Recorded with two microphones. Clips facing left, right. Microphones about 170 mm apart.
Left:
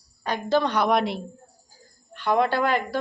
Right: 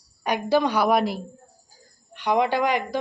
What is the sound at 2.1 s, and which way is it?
Speech, 15° right (ahead or behind).